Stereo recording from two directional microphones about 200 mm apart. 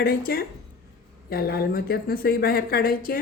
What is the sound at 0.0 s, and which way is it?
A woman's voice, 50° left (ahead or behind).